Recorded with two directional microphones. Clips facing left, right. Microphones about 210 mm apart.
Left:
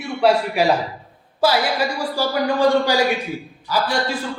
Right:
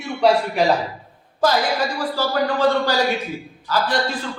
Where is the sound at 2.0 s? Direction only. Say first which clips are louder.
Even; 10° left (ahead or behind).